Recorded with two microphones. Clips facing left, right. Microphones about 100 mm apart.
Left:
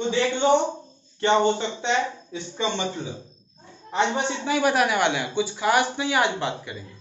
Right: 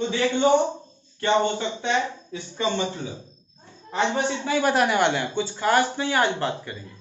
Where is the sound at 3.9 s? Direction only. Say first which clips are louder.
Even; 10° left (ahead or behind).